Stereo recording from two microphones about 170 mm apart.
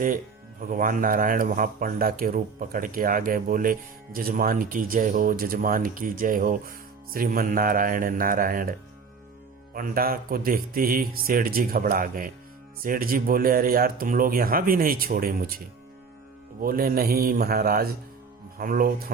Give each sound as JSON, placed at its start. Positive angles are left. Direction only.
{"t": 0.7, "sound": "speech", "side_deg": -55}
{"t": 9.7, "sound": "speech", "side_deg": -60}